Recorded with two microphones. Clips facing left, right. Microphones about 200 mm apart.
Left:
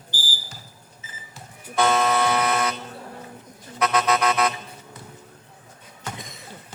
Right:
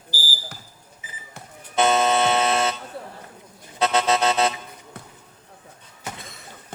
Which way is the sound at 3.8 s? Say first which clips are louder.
Right 1 dB; 25° right (ahead or behind).